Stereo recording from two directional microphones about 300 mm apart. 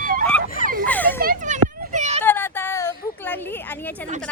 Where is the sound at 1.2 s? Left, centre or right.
Right.